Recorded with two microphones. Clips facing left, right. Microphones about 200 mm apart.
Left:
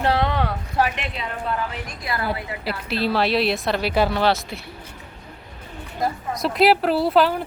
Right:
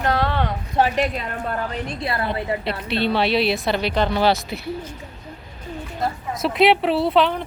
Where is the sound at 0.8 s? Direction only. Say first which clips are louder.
Right 4 dB; 35° right (ahead or behind).